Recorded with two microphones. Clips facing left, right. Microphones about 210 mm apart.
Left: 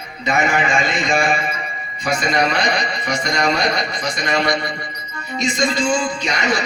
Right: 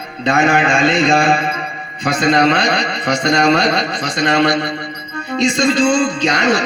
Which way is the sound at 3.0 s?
75° right (ahead or behind).